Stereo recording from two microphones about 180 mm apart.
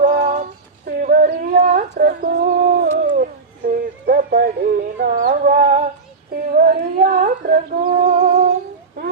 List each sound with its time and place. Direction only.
0.0 s female singing: 45° right (ahead or behind)
0.9 s a sound: 55° right (ahead or behind)
6.3 s humming: 55° right (ahead or behind)